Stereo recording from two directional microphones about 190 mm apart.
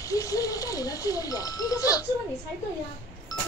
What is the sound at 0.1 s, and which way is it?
A child's voice, 20° left (ahead or behind).